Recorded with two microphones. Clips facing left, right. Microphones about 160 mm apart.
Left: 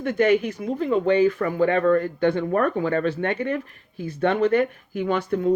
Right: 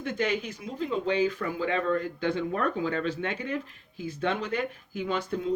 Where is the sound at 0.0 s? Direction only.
60° left (ahead or behind).